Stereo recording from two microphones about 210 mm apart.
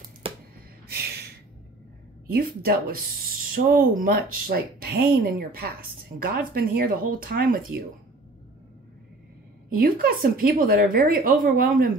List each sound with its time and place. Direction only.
0.2 s a sound: 25° right (ahead or behind)
0.8 s gasp: 50° right (ahead or behind)
2.2 s speech: 45° right (ahead or behind)
9.7 s speech: 45° right (ahead or behind)